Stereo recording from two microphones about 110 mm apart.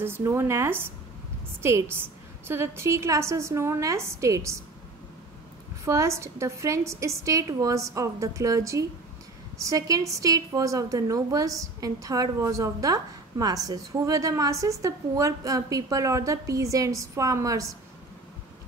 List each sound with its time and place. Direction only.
0.0 s a woman's voice: 20° right (ahead or behind)
5.9 s a woman's voice: 25° right (ahead or behind)